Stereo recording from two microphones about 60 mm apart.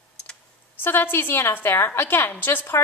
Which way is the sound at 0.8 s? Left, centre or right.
Left.